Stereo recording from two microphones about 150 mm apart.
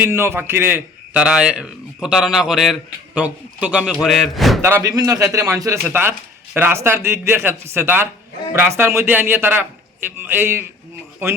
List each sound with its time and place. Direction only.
0.0 s a man's voice: 15° right (ahead or behind); by 4.6 s centre (ahead or behind)
4.6 s a man's voice: 20° right (ahead or behind)